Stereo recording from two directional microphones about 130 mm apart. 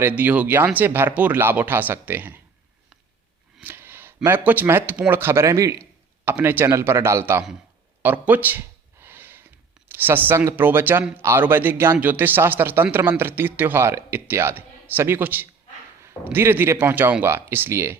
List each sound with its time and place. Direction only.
0.0 s a man's voice: 15° right (ahead or behind)
3.6 s a man's voice: 15° right (ahead or behind)
8.0 s a sound: 15° right (ahead or behind)
9.9 s a man's voice: 15° right (ahead or behind)